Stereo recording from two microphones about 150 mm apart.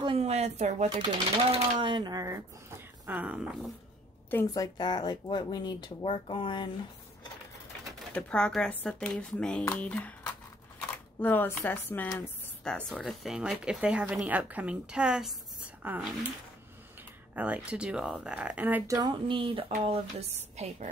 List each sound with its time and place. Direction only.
0.0 s a sound: 40° right (ahead or behind)
0.9 s speech: 40° right (ahead or behind); by 2.4 s 25° right (ahead or behind)
3.1 s speech: 10° right (ahead or behind)
4.3 s speech: 20° left (ahead or behind)
7.8 s speech: 10° left (ahead or behind)
11.1 s a woman's voice: 10° left (ahead or behind); by 16.0 s 10° right (ahead or behind)
17.4 s speech: 10° right (ahead or behind)
18.9 s a woman's voice: 30° right (ahead or behind); by 20.9 s 45° right (ahead or behind)